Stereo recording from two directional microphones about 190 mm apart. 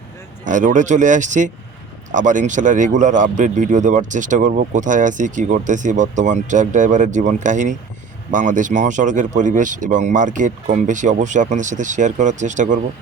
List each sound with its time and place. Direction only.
0.4 s speech: 40° right (ahead or behind)